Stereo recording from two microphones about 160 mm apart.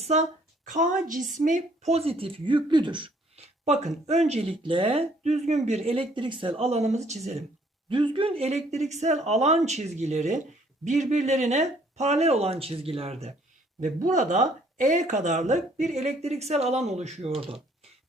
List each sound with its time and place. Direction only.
0.0 s a woman's voice: 45° right (ahead or behind)
3.7 s speech: 45° right (ahead or behind)
7.9 s a woman's voice: 30° right (ahead or behind)
13.8 s a woman's voice: 50° right (ahead or behind); by 17.6 s 35° right (ahead or behind)